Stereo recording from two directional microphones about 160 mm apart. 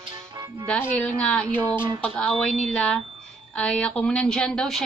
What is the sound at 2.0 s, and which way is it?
A woman's voice, 5° left (ahead or behind).